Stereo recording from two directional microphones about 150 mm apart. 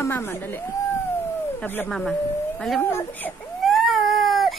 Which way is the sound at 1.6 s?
10° left (ahead or behind).